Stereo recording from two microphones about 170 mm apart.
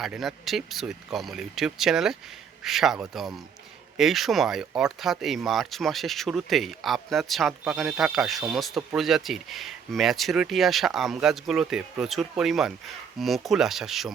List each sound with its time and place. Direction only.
0.0 s speech: centre (ahead or behind)